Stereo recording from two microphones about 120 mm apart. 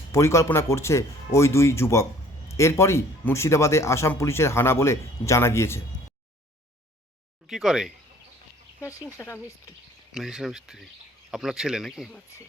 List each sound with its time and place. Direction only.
0.1 s speech: 25° left (ahead or behind)
7.4 s speech: 5° right (ahead or behind)
9.1 s speech: 20° left (ahead or behind)
10.2 s speech: 5° right (ahead or behind)